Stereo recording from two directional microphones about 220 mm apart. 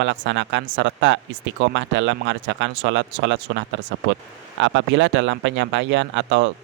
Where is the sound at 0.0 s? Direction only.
55° right (ahead or behind).